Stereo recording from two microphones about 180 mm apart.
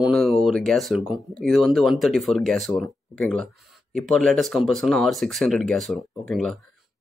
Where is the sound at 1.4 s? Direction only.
Centre (ahead or behind).